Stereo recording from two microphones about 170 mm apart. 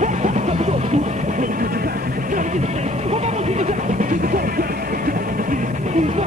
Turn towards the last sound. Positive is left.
turn(degrees=-40)  # may be behind; listen again after turning